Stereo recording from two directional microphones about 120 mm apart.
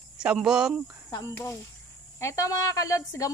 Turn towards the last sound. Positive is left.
turn(degrees=30)  # may be behind; listen again after turning